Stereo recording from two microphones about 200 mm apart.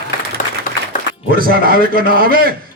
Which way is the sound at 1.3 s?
45° right (ahead or behind).